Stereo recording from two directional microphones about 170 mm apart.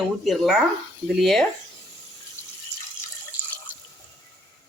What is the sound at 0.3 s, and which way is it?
Speech, centre (ahead or behind).